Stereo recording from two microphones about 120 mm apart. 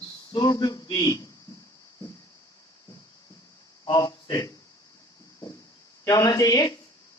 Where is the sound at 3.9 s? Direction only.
35° left (ahead or behind).